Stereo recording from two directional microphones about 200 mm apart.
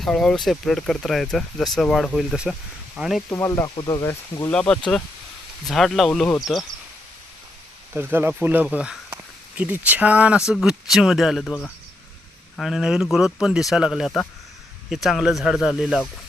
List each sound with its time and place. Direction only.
0.0 s speech: centre (ahead or behind)
3.2 s speech: 15° left (ahead or behind)
7.9 s speech: 10° right (ahead or behind)
12.5 s speech: centre (ahead or behind)